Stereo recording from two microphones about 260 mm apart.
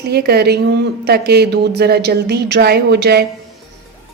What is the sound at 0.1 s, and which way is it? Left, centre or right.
A woman's voice, right.